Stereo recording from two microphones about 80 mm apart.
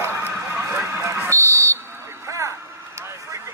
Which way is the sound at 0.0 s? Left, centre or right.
Right.